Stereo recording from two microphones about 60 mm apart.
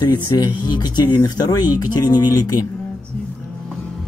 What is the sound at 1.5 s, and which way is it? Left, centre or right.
Speech, left.